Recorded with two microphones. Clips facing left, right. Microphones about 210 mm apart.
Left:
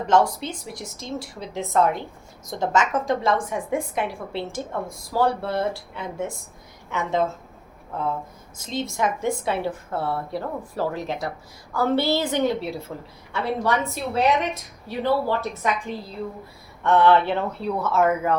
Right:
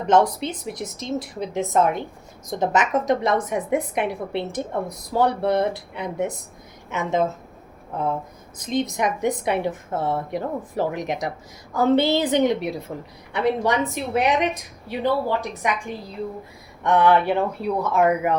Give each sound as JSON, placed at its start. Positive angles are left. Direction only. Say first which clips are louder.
{"t": 0.1, "sound": "a woman's voice", "louder": "right 2 dB", "side_deg": -20}
{"t": 16.8, "sound": "a woman's voice", "louder": "even", "side_deg": -15}